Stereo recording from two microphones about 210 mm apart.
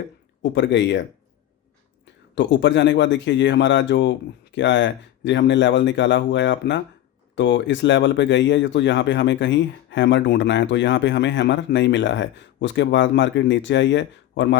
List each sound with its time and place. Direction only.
0.5 s speech: 60° left (ahead or behind)
2.3 s speech: 60° left (ahead or behind)